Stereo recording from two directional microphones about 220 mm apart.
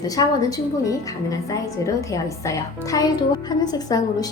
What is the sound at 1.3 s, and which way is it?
A woman's voice, 15° left (ahead or behind).